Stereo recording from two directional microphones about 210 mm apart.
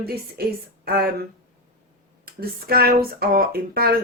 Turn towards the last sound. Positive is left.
turn(degrees=-45)  # may be behind; listen again after turning